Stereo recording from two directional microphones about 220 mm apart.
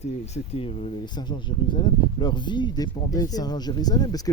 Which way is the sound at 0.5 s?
25° left (ahead or behind).